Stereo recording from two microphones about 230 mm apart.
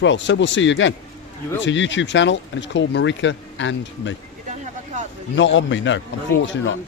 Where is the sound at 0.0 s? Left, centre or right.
Left.